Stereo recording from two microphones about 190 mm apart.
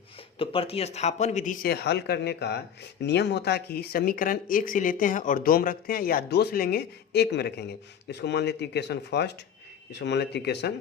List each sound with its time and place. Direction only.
0.3 s speech: 30° left (ahead or behind)
1.6 s speech: 60° left (ahead or behind)